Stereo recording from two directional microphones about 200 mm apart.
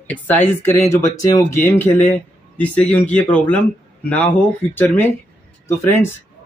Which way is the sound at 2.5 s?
5° left (ahead or behind).